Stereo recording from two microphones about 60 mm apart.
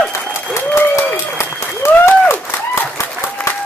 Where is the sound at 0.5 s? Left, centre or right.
Left.